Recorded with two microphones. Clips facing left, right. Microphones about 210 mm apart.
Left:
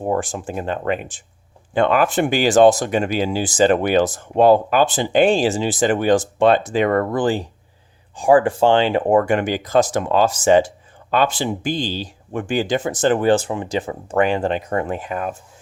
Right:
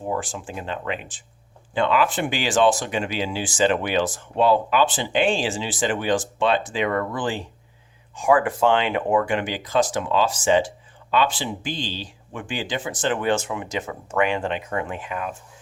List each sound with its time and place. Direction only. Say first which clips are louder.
0.0 s speech: left 6 dB; 50° left (ahead or behind)